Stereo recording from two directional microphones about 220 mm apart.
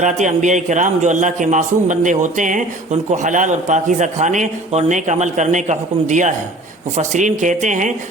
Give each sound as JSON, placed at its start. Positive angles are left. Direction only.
{"t": 0.0, "sound": "a man's voice", "side_deg": -35}